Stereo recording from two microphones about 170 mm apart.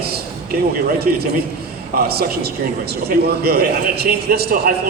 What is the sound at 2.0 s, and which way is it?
A man's voice, 65° right (ahead or behind).